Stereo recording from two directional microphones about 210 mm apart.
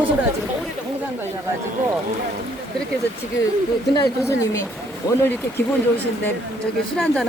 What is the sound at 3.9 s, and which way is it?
Speech, 15° left (ahead or behind).